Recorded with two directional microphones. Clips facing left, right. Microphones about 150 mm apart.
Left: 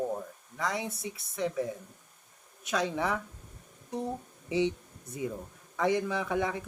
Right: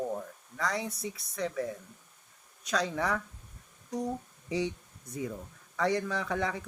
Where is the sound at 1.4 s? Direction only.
5° left (ahead or behind).